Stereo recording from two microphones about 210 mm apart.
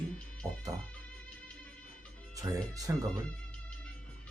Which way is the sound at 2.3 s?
15° right (ahead or behind).